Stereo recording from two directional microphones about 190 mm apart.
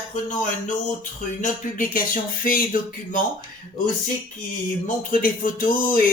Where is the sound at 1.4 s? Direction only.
45° left (ahead or behind).